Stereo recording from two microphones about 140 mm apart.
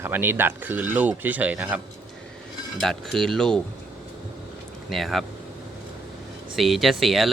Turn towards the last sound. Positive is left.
turn(degrees=0)  # may be behind; listen again after turning